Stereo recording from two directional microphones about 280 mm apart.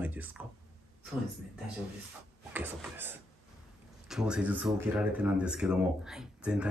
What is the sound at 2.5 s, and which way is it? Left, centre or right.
Speech, centre.